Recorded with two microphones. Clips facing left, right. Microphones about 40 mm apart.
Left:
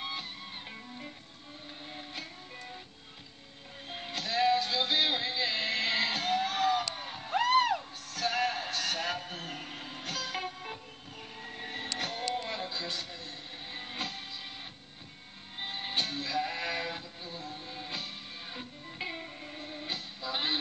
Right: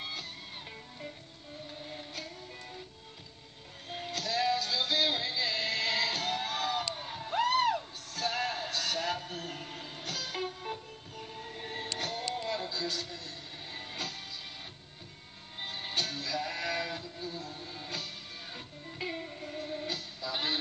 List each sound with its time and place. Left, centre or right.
0.0 s music: centre
1.9 s music: centre
3.9 s music: left
15.6 s music: left
19.9 s music: left